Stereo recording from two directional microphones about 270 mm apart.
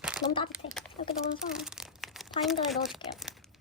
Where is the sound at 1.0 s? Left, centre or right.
Left.